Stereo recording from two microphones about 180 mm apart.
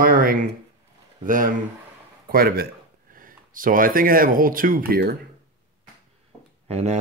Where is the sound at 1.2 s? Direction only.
50° right (ahead or behind).